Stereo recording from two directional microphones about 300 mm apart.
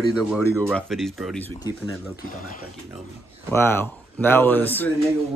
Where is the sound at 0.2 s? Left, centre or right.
Centre.